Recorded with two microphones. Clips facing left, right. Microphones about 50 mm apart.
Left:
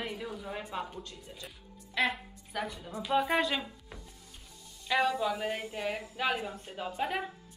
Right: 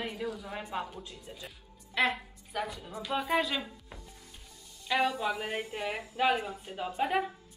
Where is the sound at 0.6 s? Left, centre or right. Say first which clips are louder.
Right 1 dB; centre.